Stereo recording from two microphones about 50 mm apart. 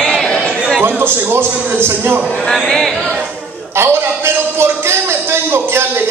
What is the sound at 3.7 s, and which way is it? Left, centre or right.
A man's voice, right.